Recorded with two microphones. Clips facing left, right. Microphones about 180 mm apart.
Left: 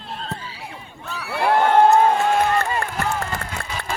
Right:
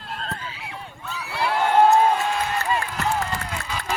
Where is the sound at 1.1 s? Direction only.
60° left (ahead or behind).